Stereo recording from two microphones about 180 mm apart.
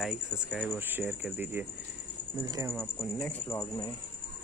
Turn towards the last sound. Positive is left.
turn(degrees=15)  # may be behind; listen again after turning